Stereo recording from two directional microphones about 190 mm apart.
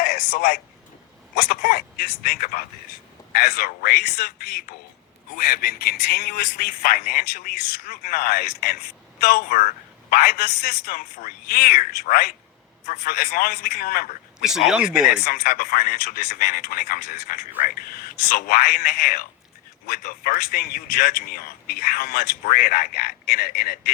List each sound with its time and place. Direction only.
0.0 s a man's voice: 50° left (ahead or behind)
15.2 s speech: 50° left (ahead or behind)